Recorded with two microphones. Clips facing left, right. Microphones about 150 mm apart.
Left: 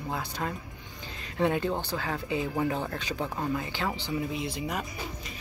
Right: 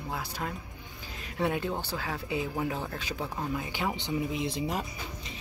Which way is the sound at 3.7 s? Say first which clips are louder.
Even; 15° right (ahead or behind).